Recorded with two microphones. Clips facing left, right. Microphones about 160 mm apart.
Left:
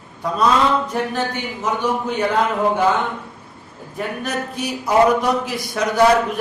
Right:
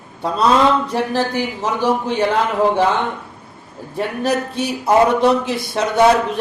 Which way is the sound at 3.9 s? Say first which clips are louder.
Right 5 dB; 30° right (ahead or behind).